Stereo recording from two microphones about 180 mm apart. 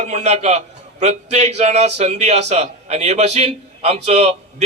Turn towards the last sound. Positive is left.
turn(degrees=-35)  # may be behind; listen again after turning